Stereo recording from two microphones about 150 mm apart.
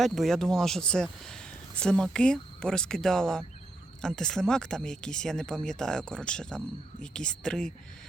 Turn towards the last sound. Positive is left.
turn(degrees=5)  # may be behind; listen again after turning